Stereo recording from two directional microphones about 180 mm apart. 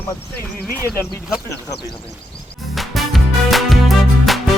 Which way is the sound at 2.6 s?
Centre (ahead or behind).